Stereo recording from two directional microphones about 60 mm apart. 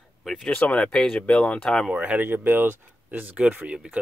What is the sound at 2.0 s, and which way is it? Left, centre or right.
Speech, right.